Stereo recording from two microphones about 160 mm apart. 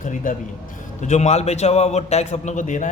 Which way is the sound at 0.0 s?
50° left (ahead or behind).